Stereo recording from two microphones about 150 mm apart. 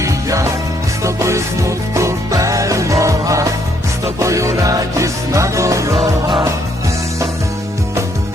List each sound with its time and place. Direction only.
0.0 s music: 20° right (ahead or behind)